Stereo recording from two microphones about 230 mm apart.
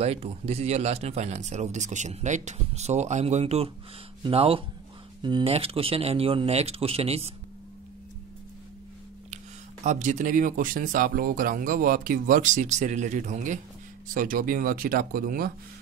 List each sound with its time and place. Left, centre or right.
0.0 s speech: right
9.8 s speech: right